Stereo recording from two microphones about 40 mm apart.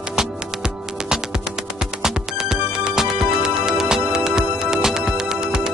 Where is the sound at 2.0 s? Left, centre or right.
Centre.